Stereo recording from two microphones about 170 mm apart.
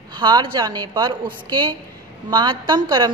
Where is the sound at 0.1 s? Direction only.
25° right (ahead or behind).